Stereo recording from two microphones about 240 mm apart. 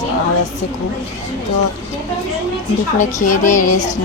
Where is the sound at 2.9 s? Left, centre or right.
Left.